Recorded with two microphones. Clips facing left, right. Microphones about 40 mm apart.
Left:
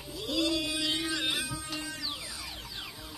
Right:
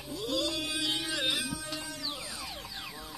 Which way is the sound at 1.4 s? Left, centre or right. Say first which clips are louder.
Even; left.